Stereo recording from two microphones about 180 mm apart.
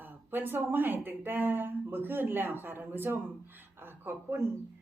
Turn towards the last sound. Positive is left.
turn(degrees=-15)  # may be behind; listen again after turning